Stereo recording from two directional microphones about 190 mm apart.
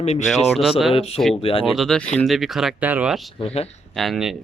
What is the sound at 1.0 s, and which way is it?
Speech, 30° left (ahead or behind).